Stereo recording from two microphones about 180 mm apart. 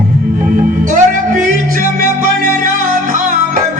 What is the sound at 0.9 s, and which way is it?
Music, 45° right (ahead or behind).